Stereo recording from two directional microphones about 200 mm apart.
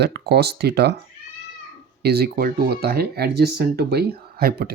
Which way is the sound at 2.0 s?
55° right (ahead or behind).